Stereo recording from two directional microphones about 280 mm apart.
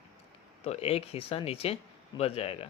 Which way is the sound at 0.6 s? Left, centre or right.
Left.